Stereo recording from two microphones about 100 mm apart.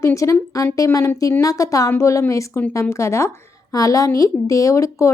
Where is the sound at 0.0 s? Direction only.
30° left (ahead or behind).